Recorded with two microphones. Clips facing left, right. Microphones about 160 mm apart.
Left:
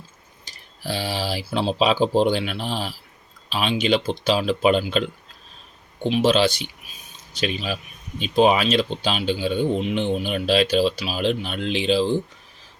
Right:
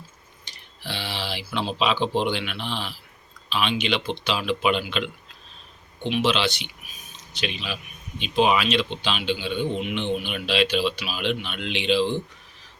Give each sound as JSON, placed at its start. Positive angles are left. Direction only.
{"t": 0.4, "sound": "speech", "side_deg": 40}